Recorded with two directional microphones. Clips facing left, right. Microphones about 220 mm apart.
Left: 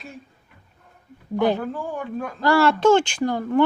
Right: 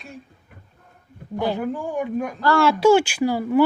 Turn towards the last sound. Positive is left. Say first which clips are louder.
# right 2 dB
turn(degrees=-5)  # may be behind; listen again after turning